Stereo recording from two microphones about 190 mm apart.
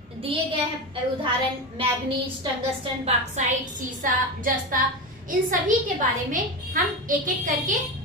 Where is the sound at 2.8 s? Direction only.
35° right (ahead or behind).